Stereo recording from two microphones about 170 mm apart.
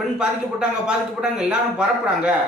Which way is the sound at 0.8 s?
5° right (ahead or behind).